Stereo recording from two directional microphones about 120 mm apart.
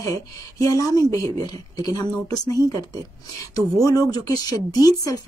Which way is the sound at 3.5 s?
30° left (ahead or behind).